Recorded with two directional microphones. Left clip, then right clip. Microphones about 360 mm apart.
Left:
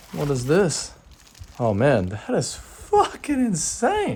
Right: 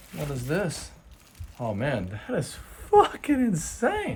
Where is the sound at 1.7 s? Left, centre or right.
Centre.